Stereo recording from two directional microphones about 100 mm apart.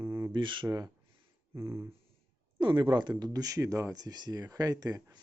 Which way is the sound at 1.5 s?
25° right (ahead or behind).